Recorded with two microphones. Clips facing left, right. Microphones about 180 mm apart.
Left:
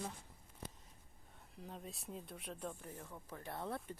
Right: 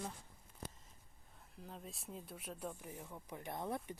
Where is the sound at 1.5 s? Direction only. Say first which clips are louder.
Left 1 dB; centre (ahead or behind).